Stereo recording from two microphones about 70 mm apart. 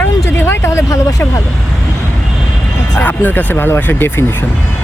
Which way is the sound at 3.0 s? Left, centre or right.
Left.